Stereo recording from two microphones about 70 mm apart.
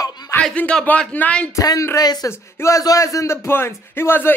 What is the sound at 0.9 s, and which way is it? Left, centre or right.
Speech, left.